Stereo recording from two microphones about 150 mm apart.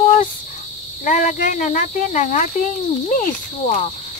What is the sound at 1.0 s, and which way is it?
Speech, 60° left (ahead or behind).